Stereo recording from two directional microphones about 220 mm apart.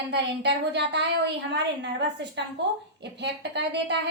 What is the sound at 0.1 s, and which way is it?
A woman's voice, 50° right (ahead or behind).